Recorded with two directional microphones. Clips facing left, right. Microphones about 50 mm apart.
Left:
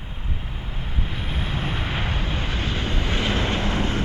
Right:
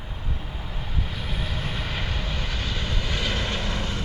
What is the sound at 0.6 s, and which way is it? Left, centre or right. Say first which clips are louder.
Vehicle: left 1 dB; left.